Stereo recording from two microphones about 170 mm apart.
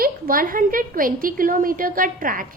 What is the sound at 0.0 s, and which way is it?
A woman's voice, 60° right (ahead or behind).